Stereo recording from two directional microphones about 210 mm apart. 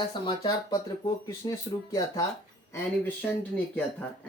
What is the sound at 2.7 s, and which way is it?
Speech, 10° left (ahead or behind).